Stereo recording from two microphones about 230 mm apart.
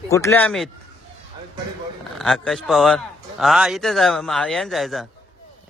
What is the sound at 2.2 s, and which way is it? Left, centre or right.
Speech, centre.